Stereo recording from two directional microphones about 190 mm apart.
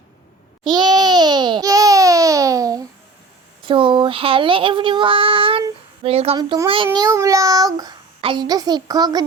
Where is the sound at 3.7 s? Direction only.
25° right (ahead or behind).